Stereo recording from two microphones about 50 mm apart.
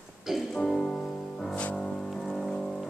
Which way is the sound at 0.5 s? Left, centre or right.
Centre.